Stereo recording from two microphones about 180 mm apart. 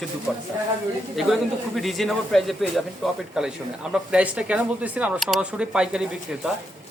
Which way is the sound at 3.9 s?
5° right (ahead or behind).